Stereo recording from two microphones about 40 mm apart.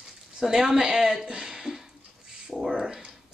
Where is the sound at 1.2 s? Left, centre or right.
Centre.